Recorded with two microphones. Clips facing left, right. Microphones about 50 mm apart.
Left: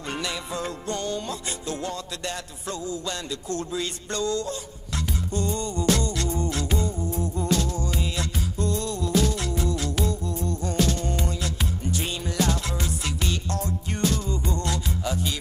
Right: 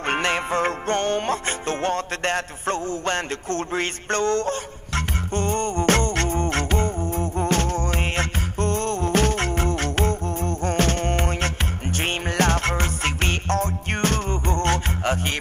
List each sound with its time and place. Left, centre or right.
0.1 s music: right